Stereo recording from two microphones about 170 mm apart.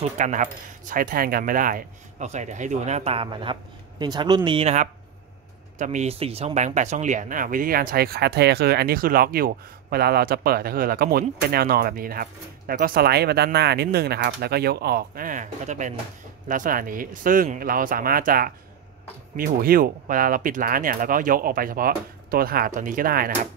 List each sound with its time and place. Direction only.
0.0 s speech: 45° right (ahead or behind)